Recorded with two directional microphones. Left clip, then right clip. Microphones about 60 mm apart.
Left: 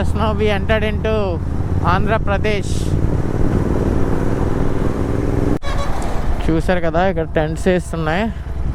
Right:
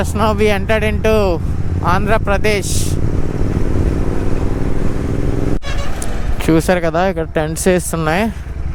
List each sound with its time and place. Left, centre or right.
0.0 s speech: right
6.4 s speech: right